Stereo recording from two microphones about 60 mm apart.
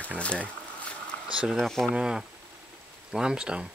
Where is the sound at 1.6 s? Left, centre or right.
Centre.